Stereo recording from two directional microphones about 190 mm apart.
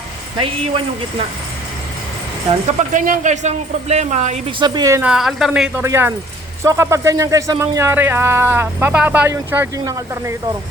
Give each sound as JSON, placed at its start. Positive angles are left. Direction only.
{"t": 2.9, "sound": "speech", "side_deg": -45}
{"t": 4.6, "sound": "speech", "side_deg": -20}
{"t": 5.0, "sound": "speech", "side_deg": 0}